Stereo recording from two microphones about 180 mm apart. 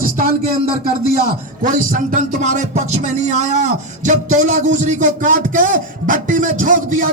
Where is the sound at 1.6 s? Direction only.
45° right (ahead or behind).